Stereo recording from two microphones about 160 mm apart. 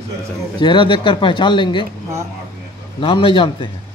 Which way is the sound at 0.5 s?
30° left (ahead or behind).